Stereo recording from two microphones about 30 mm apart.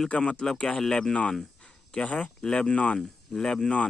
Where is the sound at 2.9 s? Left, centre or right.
Centre.